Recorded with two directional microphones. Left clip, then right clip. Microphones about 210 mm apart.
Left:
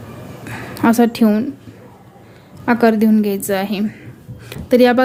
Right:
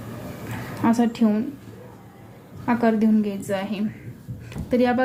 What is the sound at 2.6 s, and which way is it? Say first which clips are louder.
Speech: left 7 dB; 55° left (ahead or behind).